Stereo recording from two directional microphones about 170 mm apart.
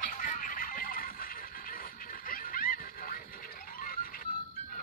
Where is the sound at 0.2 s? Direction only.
55° left (ahead or behind).